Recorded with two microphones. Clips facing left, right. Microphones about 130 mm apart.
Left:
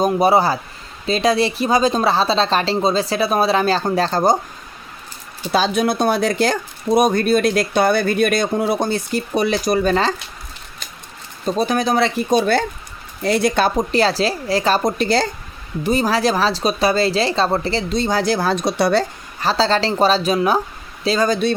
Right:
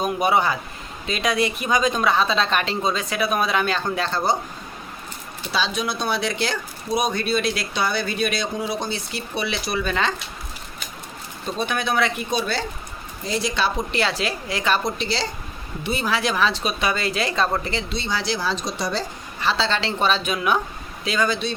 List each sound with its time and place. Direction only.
0.0 s speech: 35° left (ahead or behind)
5.5 s speech: 50° left (ahead or behind)
11.4 s speech: 35° left (ahead or behind)
12.3 s speech: 50° left (ahead or behind)
15.8 s speech: 40° left (ahead or behind); by 19.0 s 65° left (ahead or behind)
19.4 s speech: 40° left (ahead or behind)